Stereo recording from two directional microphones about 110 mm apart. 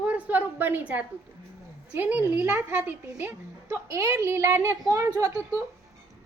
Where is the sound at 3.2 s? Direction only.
25° right (ahead or behind).